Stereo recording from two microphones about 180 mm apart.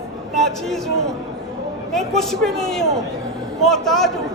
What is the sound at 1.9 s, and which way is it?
A man's voice, centre (ahead or behind).